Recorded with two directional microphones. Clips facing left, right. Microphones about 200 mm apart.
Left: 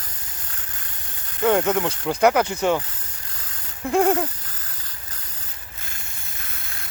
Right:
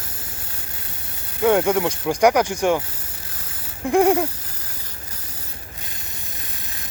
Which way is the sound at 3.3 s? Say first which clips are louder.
Right 3 dB; 5° right (ahead or behind).